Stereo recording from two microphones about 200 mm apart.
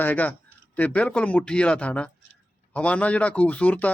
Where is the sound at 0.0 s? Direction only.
10° left (ahead or behind).